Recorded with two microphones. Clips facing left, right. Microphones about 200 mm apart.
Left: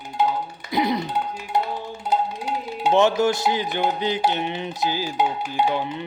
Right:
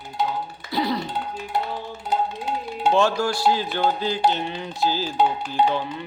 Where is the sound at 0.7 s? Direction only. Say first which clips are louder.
Left 2 dB; 20° left (ahead or behind).